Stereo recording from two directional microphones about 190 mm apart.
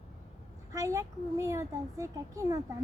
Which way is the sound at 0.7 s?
15° right (ahead or behind).